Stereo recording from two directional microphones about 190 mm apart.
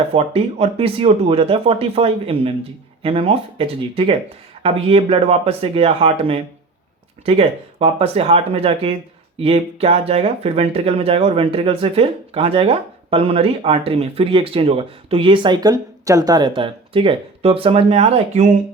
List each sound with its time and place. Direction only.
0.1 s speech: 30° right (ahead or behind)